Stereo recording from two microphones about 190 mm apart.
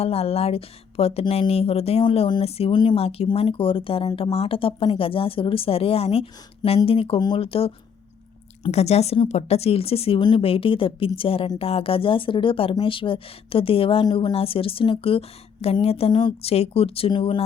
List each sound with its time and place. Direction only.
0.0 s speech: 30° left (ahead or behind)